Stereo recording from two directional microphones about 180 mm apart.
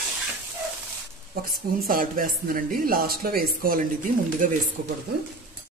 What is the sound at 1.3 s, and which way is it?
Speech, 55° right (ahead or behind).